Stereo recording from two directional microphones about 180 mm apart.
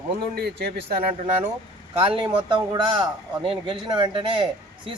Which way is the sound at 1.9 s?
30° right (ahead or behind).